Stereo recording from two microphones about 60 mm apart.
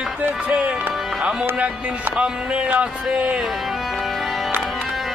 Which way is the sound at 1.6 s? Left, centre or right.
Right.